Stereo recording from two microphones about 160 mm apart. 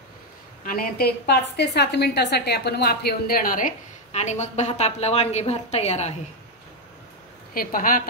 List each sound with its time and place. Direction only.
0.7 s a woman's voice: 70° left (ahead or behind); by 6.1 s 45° left (ahead or behind)
7.5 s a woman's voice: 65° left (ahead or behind)